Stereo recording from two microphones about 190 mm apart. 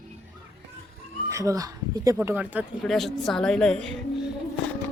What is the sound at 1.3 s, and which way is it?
Speech, 15° right (ahead or behind).